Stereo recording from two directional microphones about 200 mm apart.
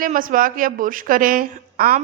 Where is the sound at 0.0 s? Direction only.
40° right (ahead or behind).